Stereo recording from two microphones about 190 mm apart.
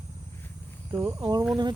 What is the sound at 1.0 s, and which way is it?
Speech, 20° right (ahead or behind).